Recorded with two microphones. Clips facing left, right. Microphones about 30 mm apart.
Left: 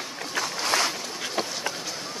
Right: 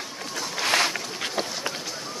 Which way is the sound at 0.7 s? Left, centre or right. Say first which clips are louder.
Right 3 dB; right.